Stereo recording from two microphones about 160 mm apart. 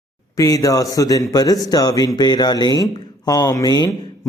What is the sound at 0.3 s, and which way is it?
Speech, 20° left (ahead or behind).